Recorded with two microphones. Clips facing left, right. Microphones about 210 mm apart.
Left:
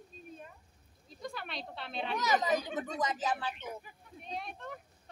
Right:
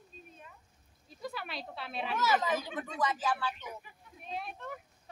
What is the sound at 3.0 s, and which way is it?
Speech, 20° left (ahead or behind).